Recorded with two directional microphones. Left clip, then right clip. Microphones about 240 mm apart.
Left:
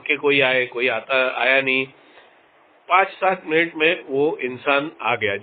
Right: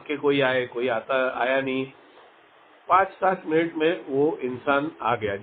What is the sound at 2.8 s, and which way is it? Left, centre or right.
A man's voice, left.